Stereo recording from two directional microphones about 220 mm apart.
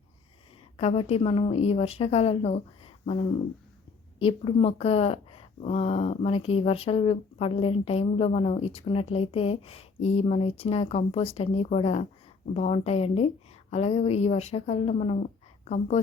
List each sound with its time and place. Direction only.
0.8 s speech: 30° left (ahead or behind)